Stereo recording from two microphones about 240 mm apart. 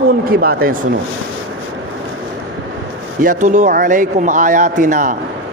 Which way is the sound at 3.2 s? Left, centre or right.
Right.